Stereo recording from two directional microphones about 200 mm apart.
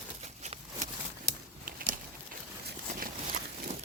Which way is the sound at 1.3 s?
45° right (ahead or behind).